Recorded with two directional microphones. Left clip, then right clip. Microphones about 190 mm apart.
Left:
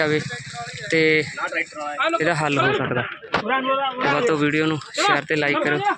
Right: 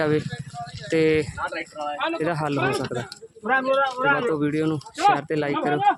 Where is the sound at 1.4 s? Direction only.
40° left (ahead or behind).